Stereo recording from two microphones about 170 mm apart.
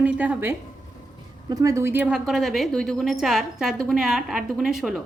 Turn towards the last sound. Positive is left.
turn(degrees=0)  # may be behind; listen again after turning